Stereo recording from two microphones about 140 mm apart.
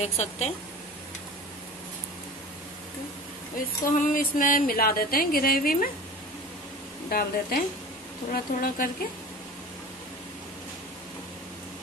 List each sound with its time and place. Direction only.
0.0 s a woman's voice: 50° left (ahead or behind)
3.8 s speech: 75° left (ahead or behind)
7.1 s speech: 90° left